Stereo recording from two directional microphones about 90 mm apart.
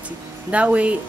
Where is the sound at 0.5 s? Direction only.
15° right (ahead or behind).